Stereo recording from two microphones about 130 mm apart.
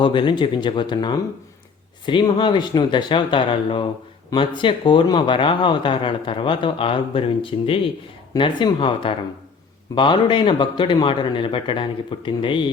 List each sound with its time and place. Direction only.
0.0 s speech: 40° left (ahead or behind)